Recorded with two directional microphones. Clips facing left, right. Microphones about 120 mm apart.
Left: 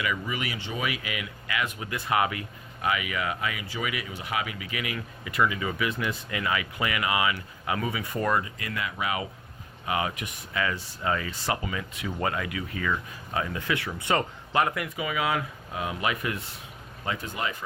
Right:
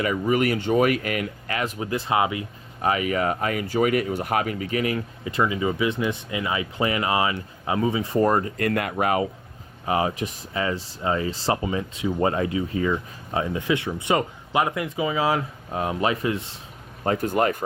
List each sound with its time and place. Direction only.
0.0 s speech: 45° right (ahead or behind); by 2.4 s 25° right (ahead or behind)
2.8 s speech: 40° right (ahead or behind)
9.8 s speech: 35° right (ahead or behind)
17.0 s speech: 45° right (ahead or behind)